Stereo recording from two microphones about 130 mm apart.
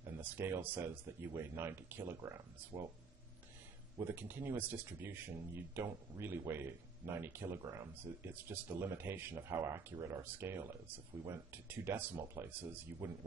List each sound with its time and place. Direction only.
0.0 s speech: 20° right (ahead or behind)
2.7 s speech: 35° right (ahead or behind)
4.0 s speech: 15° right (ahead or behind)